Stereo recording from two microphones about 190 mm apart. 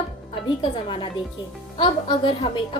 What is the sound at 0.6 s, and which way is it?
A woman's voice, 25° left (ahead or behind).